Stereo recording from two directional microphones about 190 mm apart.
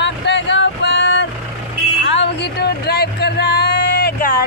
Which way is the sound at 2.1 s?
65° left (ahead or behind).